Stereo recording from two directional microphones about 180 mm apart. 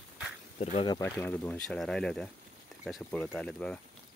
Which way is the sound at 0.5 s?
35° left (ahead or behind).